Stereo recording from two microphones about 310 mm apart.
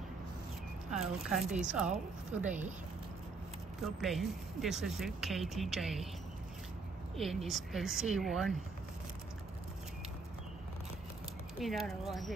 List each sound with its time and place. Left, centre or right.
0.9 s speech: centre
2.4 s speech: right
3.8 s speech: centre
7.2 s speech: centre
11.5 s speech: centre